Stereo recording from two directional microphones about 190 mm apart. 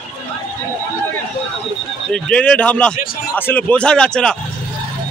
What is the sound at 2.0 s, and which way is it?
A man's voice, 5° left (ahead or behind).